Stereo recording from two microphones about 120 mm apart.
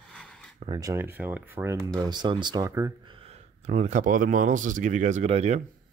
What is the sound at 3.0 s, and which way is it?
Speech, 55° right (ahead or behind).